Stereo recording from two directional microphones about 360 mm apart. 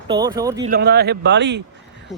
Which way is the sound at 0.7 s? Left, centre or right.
Right.